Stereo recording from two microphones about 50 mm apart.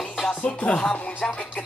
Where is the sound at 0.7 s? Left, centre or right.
Left.